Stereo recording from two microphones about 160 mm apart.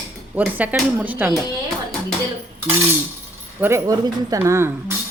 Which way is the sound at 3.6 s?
20° right (ahead or behind).